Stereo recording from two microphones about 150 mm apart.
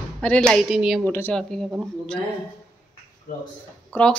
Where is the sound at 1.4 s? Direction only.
Centre (ahead or behind).